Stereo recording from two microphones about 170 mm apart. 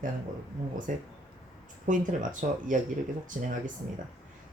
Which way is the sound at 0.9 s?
50° right (ahead or behind).